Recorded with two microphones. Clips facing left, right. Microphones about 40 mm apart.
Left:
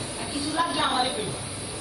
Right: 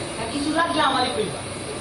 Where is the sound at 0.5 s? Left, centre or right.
Right.